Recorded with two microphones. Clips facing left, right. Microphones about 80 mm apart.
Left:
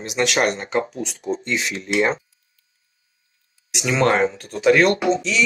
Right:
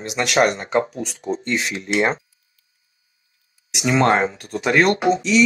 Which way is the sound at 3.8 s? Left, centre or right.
Right.